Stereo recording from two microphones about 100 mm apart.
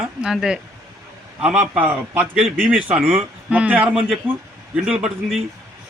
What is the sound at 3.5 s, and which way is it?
A man's voice, 15° right (ahead or behind).